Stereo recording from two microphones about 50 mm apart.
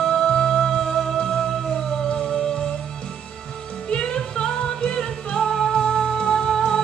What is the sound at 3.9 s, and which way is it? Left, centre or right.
Music, centre.